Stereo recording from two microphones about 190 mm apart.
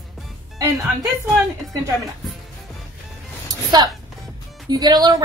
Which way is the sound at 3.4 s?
20° right (ahead or behind).